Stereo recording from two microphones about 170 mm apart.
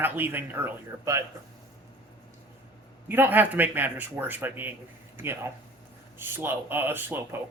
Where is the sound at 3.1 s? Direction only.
10° right (ahead or behind).